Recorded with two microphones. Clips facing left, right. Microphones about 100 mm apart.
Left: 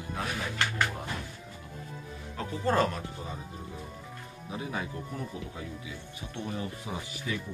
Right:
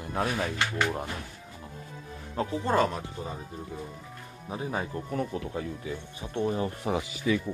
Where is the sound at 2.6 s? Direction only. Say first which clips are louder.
Right 1 dB; 15° right (ahead or behind).